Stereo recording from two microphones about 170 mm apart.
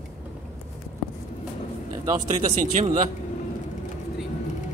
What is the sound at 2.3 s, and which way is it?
Speech, 40° right (ahead or behind).